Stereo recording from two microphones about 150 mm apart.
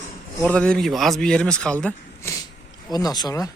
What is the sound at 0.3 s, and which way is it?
Speech, 10° left (ahead or behind).